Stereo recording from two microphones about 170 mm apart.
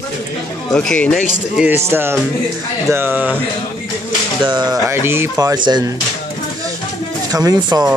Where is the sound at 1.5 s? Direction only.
10° right (ahead or behind).